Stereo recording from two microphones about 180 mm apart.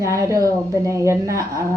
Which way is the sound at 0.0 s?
15° right (ahead or behind).